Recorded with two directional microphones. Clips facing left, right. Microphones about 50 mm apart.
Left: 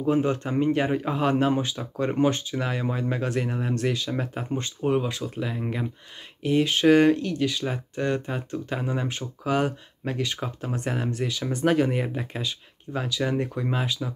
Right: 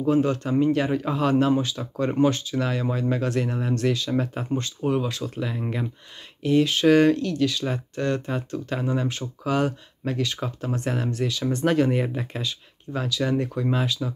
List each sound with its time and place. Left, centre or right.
0.0 s a man's voice: left
1.8 s speech: centre
2.1 s speech: centre
4.6 s a man's voice: left
5.2 s speech: centre
6.4 s speech: centre